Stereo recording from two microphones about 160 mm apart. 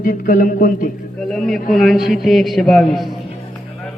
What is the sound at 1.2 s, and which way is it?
A man's voice, 5° left (ahead or behind).